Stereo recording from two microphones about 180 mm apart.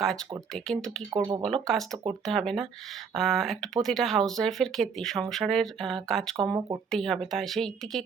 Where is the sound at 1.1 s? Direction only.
20° right (ahead or behind).